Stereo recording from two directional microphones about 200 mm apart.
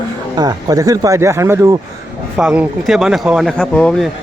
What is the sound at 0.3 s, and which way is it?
Speech, 20° right (ahead or behind).